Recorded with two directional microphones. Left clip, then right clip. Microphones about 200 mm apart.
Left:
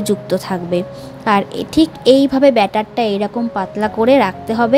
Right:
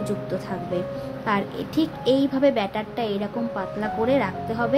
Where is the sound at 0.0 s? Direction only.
45° left (ahead or behind).